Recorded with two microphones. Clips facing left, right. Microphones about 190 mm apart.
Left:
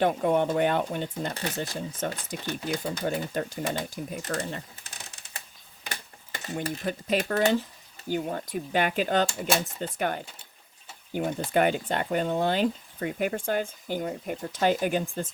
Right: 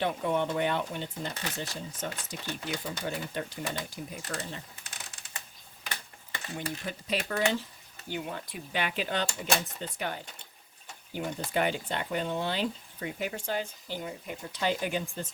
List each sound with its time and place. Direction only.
0.0 s speech: 50° left (ahead or behind)
2.6 s speech: 40° left (ahead or behind)
6.3 s speech: 45° left (ahead or behind)